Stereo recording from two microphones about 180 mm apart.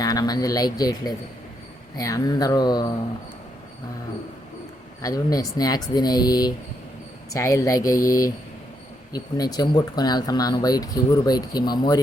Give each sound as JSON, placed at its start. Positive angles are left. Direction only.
{"t": 0.0, "sound": "speech", "side_deg": 20}
{"t": 5.0, "sound": "speech", "side_deg": 20}